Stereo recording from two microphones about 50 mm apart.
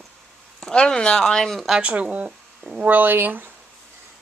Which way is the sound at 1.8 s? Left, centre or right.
Right.